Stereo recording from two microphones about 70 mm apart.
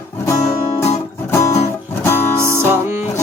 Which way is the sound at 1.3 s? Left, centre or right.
Left.